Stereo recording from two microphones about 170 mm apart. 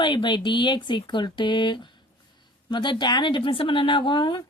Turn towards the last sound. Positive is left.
turn(degrees=25)  # may be behind; listen again after turning